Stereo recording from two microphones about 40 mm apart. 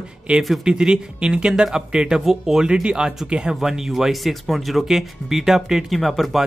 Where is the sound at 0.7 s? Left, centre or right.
Centre.